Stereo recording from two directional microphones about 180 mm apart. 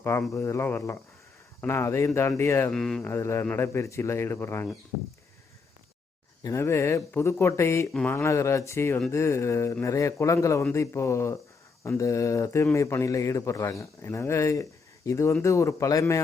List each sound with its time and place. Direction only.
0.0 s a man's voice: 15° left (ahead or behind)
6.4 s a man's voice: 15° left (ahead or behind)